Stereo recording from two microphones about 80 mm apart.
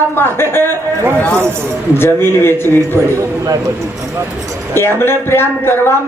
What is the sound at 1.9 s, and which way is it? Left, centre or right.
Speech, left.